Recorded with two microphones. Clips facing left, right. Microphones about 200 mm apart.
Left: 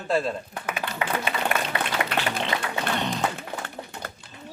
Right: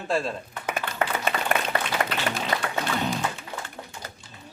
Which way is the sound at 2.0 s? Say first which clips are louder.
Right 1 dB; 45° right (ahead or behind).